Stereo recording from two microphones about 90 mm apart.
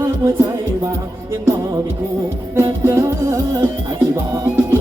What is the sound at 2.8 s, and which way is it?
Music, 30° right (ahead or behind).